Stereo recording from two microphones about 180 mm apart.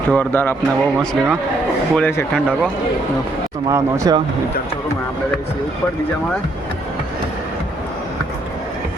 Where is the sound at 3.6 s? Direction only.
20° right (ahead or behind).